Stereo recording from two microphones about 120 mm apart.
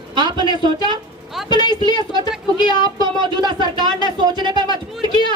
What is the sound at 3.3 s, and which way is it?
A woman's voice, 40° right (ahead or behind).